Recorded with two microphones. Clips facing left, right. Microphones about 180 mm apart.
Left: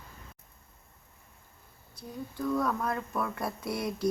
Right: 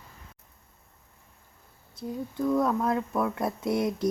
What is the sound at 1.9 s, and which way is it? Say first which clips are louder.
Speech: right 6 dB; 20° right (ahead or behind).